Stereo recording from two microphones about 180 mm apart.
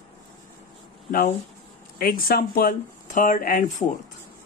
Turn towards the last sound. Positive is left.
turn(degrees=45)  # may be behind; listen again after turning